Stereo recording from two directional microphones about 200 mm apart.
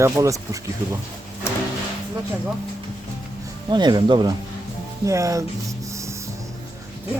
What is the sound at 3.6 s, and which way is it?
Speech, 20° right (ahead or behind).